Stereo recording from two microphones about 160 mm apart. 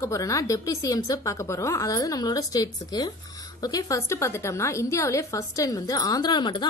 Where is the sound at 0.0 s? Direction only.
20° left (ahead or behind).